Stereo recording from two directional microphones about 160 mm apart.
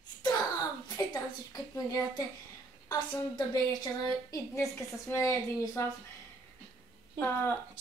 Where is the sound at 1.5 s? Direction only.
25° left (ahead or behind).